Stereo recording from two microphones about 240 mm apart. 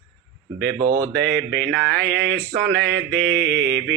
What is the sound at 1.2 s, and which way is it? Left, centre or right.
Mantra, right.